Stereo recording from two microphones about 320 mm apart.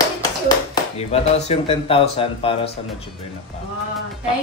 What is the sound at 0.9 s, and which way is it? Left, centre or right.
Speech, centre.